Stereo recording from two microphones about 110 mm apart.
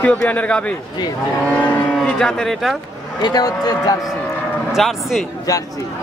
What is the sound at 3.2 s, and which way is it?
Speech, 35° left (ahead or behind).